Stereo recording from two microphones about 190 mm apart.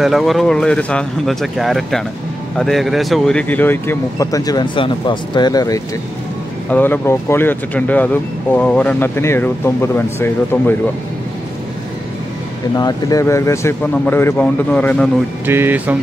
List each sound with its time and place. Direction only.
0.0 s speech: centre (ahead or behind)
12.7 s speech: 20° left (ahead or behind)
15.4 s speech: 10° right (ahead or behind)